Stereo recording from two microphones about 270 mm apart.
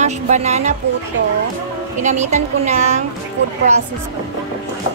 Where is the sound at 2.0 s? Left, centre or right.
Right.